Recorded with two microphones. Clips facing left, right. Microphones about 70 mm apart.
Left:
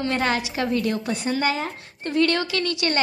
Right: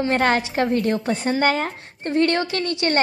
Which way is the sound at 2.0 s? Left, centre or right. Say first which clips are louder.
Right 2 dB; right.